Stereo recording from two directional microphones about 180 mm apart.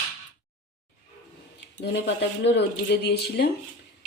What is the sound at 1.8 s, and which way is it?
Speech, 70° left (ahead or behind).